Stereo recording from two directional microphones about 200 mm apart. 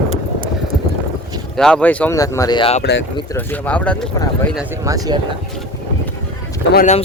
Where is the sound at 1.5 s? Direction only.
5° left (ahead or behind); by 2.8 s 25° left (ahead or behind).